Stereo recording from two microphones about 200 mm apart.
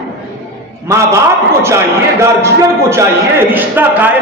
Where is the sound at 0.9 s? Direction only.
15° right (ahead or behind).